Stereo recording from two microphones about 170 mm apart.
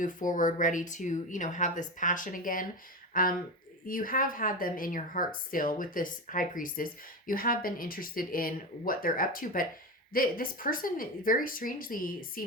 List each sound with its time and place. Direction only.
0.0 s speech: 50° left (ahead or behind)